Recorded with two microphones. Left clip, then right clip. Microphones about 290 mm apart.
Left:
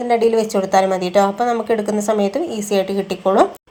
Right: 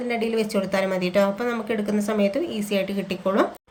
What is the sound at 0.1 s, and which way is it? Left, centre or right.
A woman's voice, centre.